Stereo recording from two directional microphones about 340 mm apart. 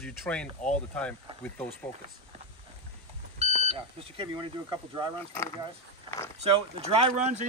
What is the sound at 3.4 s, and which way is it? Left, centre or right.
Speech, centre.